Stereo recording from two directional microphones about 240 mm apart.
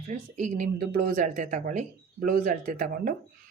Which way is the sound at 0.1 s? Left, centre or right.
Right.